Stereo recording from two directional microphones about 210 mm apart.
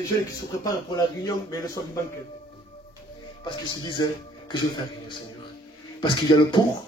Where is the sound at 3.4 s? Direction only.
20° left (ahead or behind).